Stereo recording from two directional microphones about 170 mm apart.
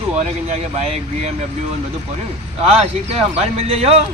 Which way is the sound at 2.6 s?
35° right (ahead or behind).